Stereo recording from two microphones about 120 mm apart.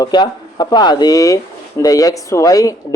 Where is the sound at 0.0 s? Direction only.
35° left (ahead or behind).